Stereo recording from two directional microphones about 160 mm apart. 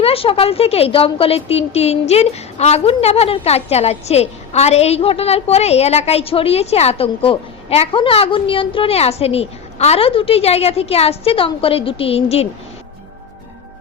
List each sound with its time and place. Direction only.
0.0 s a woman's voice: 35° left (ahead or behind)